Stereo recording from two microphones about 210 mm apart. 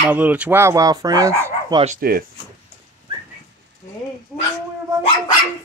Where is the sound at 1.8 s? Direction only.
40° right (ahead or behind).